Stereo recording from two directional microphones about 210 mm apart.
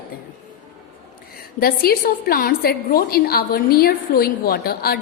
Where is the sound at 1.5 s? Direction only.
45° left (ahead or behind).